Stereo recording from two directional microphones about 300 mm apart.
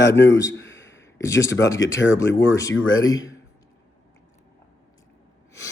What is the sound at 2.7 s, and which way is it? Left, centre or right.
Speech, left.